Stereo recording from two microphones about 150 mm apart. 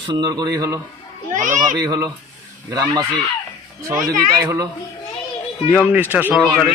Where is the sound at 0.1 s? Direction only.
30° right (ahead or behind).